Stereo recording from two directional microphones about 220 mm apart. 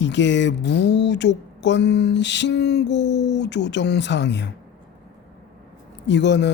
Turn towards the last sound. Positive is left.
turn(degrees=50)  # may be behind; listen again after turning